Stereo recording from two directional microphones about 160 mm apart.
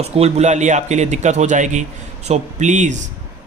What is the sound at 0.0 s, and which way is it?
A man's voice, 40° right (ahead or behind).